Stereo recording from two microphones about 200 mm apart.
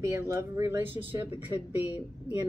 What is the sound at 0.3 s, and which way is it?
Speech, 15° right (ahead or behind).